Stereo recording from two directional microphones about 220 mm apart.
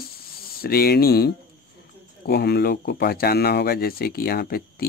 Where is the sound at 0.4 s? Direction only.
45° left (ahead or behind).